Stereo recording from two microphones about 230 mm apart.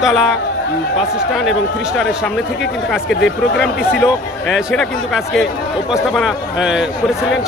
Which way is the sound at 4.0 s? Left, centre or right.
Centre.